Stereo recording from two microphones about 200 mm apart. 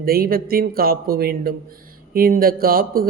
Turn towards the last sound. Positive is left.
turn(degrees=-45)  # may be behind; listen again after turning